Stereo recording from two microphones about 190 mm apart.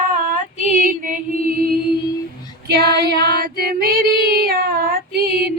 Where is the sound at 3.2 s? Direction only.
50° right (ahead or behind).